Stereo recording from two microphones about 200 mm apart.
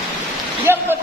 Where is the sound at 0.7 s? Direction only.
10° right (ahead or behind).